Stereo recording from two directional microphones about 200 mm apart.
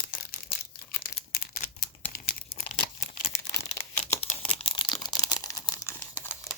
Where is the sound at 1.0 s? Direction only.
45° left (ahead or behind).